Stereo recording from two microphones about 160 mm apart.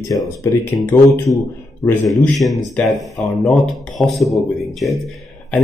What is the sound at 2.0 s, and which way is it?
Speech, centre (ahead or behind).